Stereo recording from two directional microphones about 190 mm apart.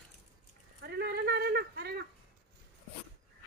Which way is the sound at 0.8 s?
60° right (ahead or behind).